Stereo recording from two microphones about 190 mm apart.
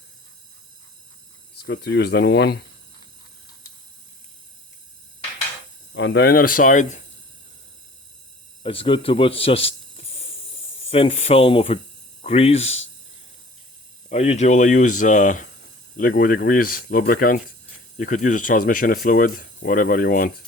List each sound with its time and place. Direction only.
1.5 s speech: 60° left (ahead or behind)
5.9 s speech: 75° left (ahead or behind)
6.2 s speech: 50° left (ahead or behind)
8.6 s speech: 30° left (ahead or behind)
14.1 s speech: 35° left (ahead or behind)